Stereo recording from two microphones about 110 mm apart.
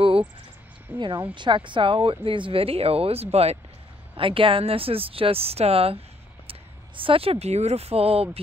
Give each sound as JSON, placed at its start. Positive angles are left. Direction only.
{"t": 0.9, "sound": "speech", "side_deg": -45}
{"t": 4.1, "sound": "speech", "side_deg": -55}